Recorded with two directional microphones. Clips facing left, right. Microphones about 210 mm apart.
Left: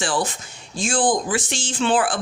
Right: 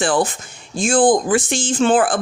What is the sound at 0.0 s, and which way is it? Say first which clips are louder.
Speech: right 6 dB; 55° right (ahead or behind).